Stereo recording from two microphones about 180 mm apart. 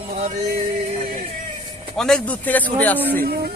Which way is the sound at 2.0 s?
5° left (ahead or behind).